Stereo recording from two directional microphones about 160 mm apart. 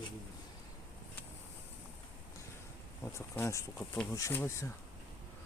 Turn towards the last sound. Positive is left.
turn(degrees=15)  # may be behind; listen again after turning